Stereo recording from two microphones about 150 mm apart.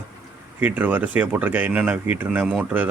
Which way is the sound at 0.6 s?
10° right (ahead or behind).